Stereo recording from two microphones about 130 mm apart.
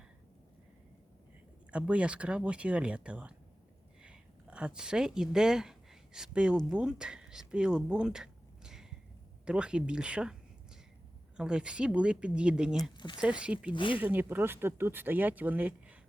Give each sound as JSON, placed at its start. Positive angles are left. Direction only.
{"t": 1.7, "sound": "speech", "side_deg": -10}
{"t": 11.3, "sound": "speech", "side_deg": -5}
{"t": 12.7, "sound": "speech", "side_deg": 30}
{"t": 13.4, "sound": "speech", "side_deg": -10}
{"t": 13.7, "sound": "speech", "side_deg": 40}
{"t": 14.0, "sound": "speech", "side_deg": -15}